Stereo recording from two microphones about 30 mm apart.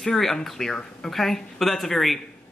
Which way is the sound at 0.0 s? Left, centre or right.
Centre.